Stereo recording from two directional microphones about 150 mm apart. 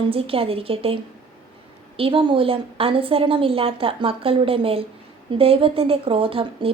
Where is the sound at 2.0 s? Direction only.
35° right (ahead or behind).